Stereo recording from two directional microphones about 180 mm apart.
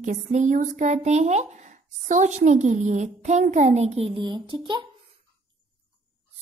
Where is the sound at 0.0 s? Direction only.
45° right (ahead or behind); by 4.8 s 25° right (ahead or behind).